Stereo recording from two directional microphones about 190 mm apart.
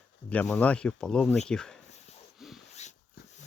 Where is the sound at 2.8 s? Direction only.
35° left (ahead or behind).